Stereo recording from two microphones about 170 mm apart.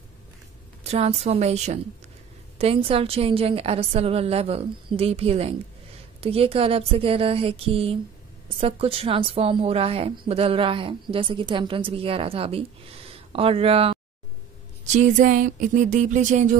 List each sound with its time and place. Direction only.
0.8 s a woman's voice: 40° right (ahead or behind)
14.9 s speech: 45° right (ahead or behind)